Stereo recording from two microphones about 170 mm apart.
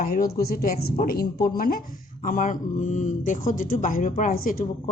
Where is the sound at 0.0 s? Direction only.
60° left (ahead or behind).